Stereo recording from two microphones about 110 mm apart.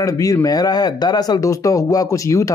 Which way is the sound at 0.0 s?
30° left (ahead or behind).